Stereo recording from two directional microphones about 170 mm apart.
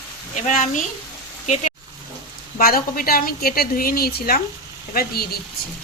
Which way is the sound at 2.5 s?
60° left (ahead or behind).